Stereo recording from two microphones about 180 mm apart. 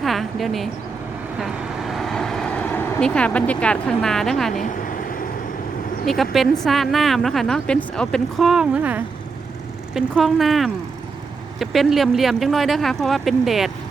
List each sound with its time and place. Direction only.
0.0 s a woman's voice: centre (ahead or behind)
1.9 s vehicle: centre (ahead or behind)
4.6 s vehicle: 50° left (ahead or behind)
6.3 s speech: centre (ahead or behind)